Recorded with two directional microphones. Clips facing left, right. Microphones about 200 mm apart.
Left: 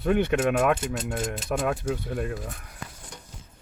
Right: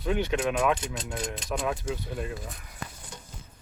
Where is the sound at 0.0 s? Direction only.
55° left (ahead or behind).